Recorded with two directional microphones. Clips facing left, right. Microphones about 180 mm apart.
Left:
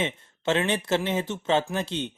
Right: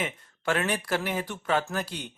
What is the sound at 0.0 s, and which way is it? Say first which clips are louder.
Speech: left 3 dB; 25° left (ahead or behind).